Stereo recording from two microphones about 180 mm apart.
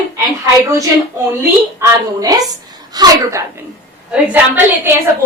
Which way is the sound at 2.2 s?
20° right (ahead or behind).